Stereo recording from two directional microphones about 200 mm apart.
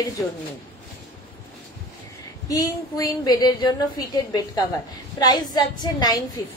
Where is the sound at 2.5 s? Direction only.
20° left (ahead or behind).